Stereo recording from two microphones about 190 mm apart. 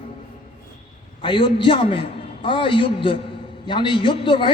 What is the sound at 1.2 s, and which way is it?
A man's voice, 25° left (ahead or behind).